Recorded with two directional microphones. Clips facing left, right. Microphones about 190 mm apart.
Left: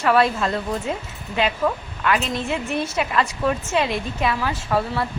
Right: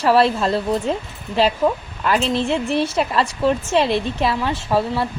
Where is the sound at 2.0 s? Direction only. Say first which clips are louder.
Right 4 dB; 30° right (ahead or behind).